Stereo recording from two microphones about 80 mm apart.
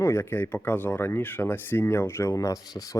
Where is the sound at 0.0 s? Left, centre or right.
Left.